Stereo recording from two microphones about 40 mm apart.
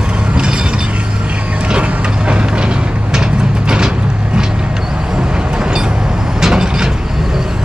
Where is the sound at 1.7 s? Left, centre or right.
Right.